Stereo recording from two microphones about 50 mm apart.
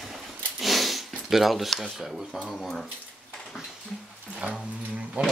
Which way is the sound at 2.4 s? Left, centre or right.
Centre.